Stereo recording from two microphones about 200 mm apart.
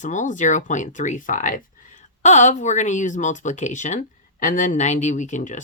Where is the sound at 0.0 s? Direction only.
40° left (ahead or behind).